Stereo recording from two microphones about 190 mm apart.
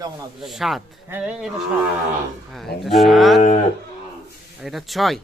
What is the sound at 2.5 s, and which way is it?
Speech, centre (ahead or behind).